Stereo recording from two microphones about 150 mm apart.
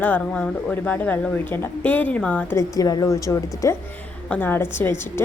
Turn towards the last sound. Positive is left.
turn(degrees=15)  # may be behind; listen again after turning